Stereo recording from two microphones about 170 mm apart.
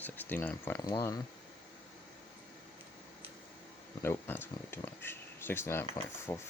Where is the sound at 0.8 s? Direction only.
25° left (ahead or behind).